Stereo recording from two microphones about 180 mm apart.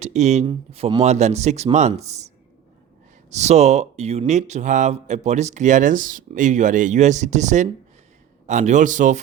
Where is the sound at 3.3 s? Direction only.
40° right (ahead or behind).